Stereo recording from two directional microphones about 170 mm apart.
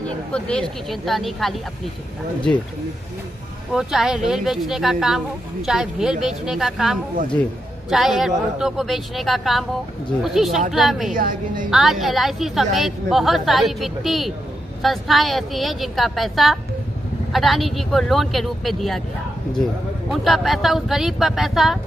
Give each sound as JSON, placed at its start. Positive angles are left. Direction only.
{"t": 0.0, "sound": "a woman's voice", "side_deg": 5}
{"t": 3.7, "sound": "a woman's voice", "side_deg": 0}
{"t": 11.1, "sound": "a woman's voice", "side_deg": -50}
{"t": 11.7, "sound": "a woman's voice", "side_deg": 0}
{"t": 20.1, "sound": "a woman's voice", "side_deg": 0}